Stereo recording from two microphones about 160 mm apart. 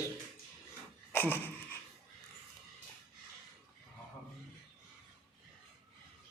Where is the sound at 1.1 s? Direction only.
10° left (ahead or behind).